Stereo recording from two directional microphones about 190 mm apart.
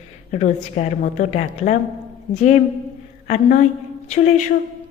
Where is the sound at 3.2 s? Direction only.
40° left (ahead or behind).